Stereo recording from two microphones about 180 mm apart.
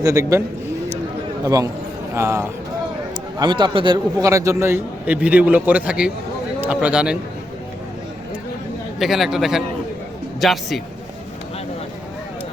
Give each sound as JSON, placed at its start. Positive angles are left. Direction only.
{"t": 0.0, "sound": "a man's voice", "side_deg": -15}
{"t": 1.5, "sound": "a man's voice", "side_deg": -20}
{"t": 3.3, "sound": "a man's voice", "side_deg": -25}
{"t": 9.0, "sound": "a man's voice", "side_deg": 0}